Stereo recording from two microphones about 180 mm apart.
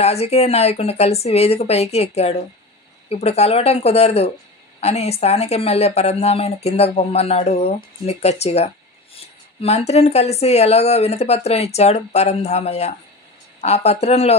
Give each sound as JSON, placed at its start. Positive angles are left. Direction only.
{"t": 0.0, "sound": "a woman's voice", "side_deg": 35}